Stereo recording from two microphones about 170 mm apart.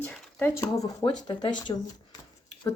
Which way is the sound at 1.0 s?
30° left (ahead or behind).